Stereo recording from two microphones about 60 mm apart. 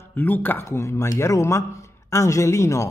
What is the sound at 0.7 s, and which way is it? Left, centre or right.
A man's voice, left.